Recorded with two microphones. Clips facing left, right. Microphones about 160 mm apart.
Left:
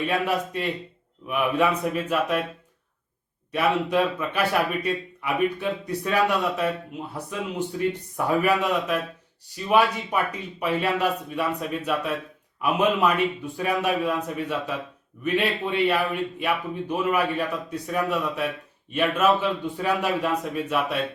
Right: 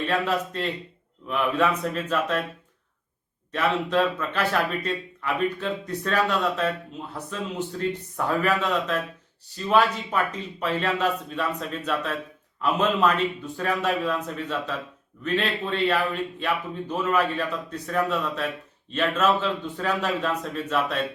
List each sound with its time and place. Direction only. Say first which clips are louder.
0.0 s a man's voice: even; 10° left (ahead or behind)
3.5 s a man's voice: left 1 dB; 10° left (ahead or behind)